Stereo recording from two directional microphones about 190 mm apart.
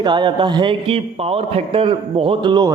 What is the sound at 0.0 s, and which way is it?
A man's voice, 25° right (ahead or behind).